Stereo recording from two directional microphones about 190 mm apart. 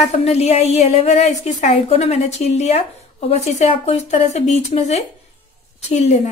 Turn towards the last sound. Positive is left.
turn(degrees=35)  # may be behind; listen again after turning